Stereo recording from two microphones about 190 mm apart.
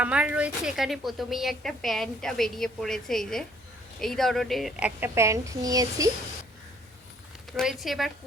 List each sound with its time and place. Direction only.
0.0 s a woman's voice: 5° right (ahead or behind)
4.9 s speech: 15° right (ahead or behind)
7.5 s a woman's voice: centre (ahead or behind)